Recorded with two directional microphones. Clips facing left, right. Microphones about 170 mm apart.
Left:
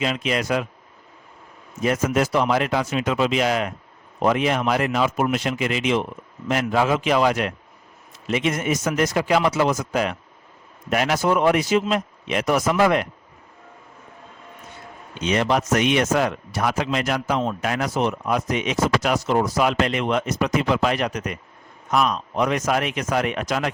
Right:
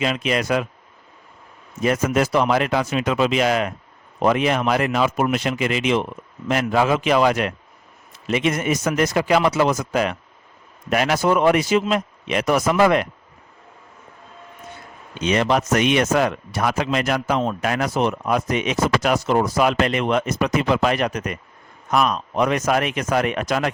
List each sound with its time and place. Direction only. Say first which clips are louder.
0.0 s a man's voice: right 2 dB; 65° right (ahead or behind)
1.8 s speech: right 1 dB; 70° right (ahead or behind)
15.2 s a man's voice: right 2 dB; 75° right (ahead or behind); by 23.7 s 55° right (ahead or behind)